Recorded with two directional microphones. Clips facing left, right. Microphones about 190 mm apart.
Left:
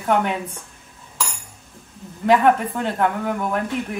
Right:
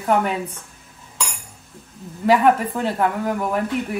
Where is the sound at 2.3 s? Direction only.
5° right (ahead or behind).